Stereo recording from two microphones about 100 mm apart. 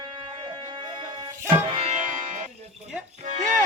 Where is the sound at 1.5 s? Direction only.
65° right (ahead or behind).